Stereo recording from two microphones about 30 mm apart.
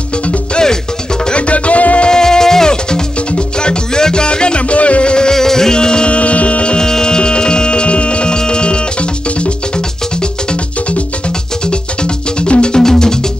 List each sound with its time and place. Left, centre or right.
1.3 s music: left
2.0 s music: left
5.3 s music: centre
6.0 s music: left
6.8 s music: left
12.7 s music: left